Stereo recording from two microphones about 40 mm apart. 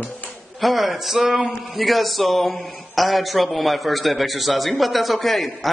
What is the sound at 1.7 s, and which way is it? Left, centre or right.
A man's voice, centre.